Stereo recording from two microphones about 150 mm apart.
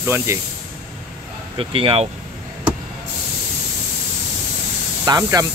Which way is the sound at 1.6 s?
35° right (ahead or behind).